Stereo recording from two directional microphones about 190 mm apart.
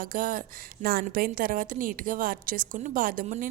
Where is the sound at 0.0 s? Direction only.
45° right (ahead or behind).